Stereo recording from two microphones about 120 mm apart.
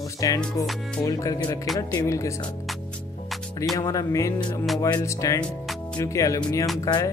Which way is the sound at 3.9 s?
25° left (ahead or behind).